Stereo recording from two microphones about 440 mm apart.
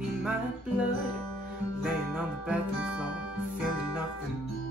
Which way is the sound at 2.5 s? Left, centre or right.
Centre.